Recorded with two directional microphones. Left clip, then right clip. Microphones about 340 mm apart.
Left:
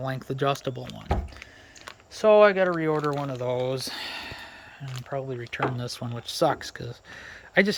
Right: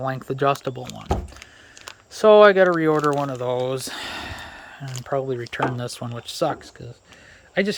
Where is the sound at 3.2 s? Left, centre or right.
Centre.